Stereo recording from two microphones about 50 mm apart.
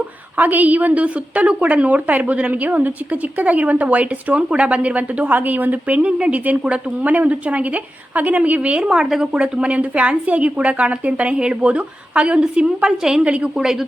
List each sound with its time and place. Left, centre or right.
0.3 s a woman's voice: right
6.0 s a woman's voice: right
8.8 s a woman's voice: centre
9.2 s a woman's voice: right